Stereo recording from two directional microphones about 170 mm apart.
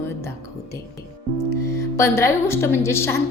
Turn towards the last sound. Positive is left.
turn(degrees=15)  # may be behind; listen again after turning